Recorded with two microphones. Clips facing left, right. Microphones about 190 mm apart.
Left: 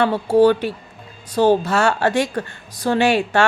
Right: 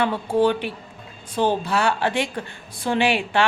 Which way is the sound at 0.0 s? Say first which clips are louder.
Left 5 dB; 40° left (ahead or behind).